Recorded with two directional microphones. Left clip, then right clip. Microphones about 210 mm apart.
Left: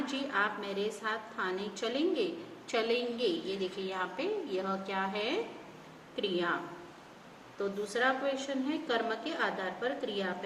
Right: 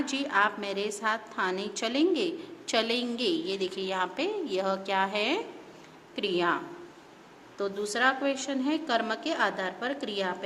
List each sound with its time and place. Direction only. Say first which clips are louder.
0.0 s a woman's voice: right 6 dB; 55° right (ahead or behind)
7.6 s a woman's voice: right 4 dB; 55° right (ahead or behind)